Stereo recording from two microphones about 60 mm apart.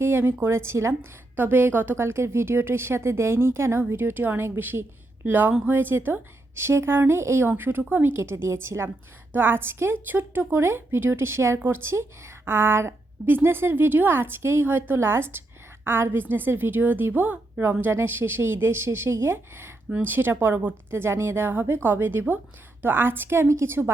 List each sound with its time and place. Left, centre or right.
0.0 s a woman's voice: right
1.4 s a woman's voice: right
6.6 s a woman's voice: right
8.1 s a woman's voice: right
21.0 s a woman's voice: right
21.4 s a woman's voice: right